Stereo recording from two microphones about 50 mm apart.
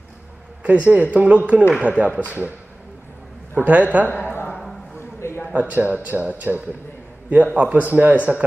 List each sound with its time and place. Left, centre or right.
0.7 s speech: right
3.6 s speech: right
5.5 s a man's voice: right